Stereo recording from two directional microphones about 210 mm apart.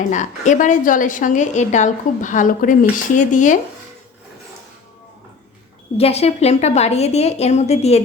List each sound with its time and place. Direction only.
0.1 s a woman's voice: 35° left (ahead or behind)
6.0 s a woman's voice: 30° left (ahead or behind)